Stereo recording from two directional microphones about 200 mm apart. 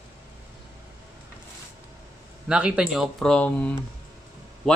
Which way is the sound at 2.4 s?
5° right (ahead or behind).